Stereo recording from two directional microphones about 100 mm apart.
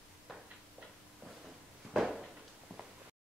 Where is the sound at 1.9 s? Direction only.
5° right (ahead or behind).